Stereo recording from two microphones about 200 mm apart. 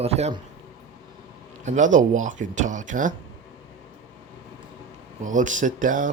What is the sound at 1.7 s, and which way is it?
Speech, 40° right (ahead or behind).